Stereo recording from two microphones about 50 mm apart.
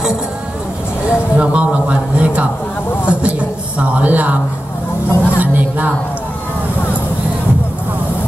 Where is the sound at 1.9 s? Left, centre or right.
Right.